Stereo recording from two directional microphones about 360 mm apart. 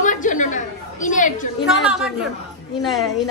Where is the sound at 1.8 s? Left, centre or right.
Centre.